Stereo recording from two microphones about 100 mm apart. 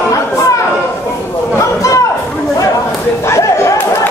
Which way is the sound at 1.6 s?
30° left (ahead or behind).